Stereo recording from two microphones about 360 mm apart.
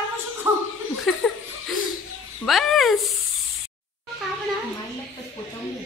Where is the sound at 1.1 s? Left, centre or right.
Centre.